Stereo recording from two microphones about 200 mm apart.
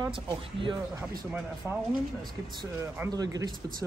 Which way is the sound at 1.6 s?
10° right (ahead or behind).